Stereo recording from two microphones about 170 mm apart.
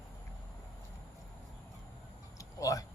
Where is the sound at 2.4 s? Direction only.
20° left (ahead or behind).